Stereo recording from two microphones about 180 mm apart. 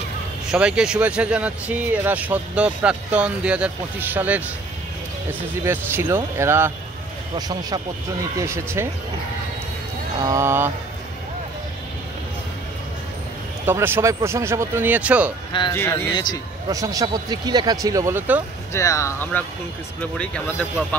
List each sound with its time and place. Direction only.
0.5 s speech: 5° right (ahead or behind)
5.6 s speech: 10° right (ahead or behind)
10.1 s speech: 20° right (ahead or behind)
13.7 s speech: 10° right (ahead or behind)
15.7 s speech: 15° left (ahead or behind)
16.6 s speech: 20° right (ahead or behind)
18.7 s speech: 15° left (ahead or behind)